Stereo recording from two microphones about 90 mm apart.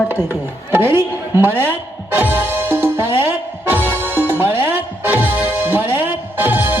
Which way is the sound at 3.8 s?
20° left (ahead or behind).